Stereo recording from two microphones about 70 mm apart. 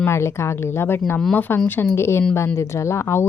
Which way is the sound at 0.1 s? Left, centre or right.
Left.